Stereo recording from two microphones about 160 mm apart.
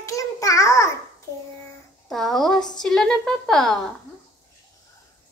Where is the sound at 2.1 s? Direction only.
Centre (ahead or behind).